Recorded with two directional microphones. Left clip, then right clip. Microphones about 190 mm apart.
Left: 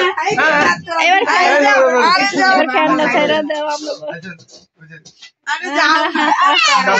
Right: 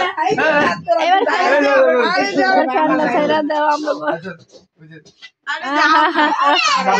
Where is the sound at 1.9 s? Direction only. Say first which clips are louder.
Left 3 dB; 50° left (ahead or behind).